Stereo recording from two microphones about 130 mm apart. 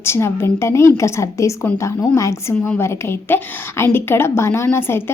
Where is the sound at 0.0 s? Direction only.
20° left (ahead or behind).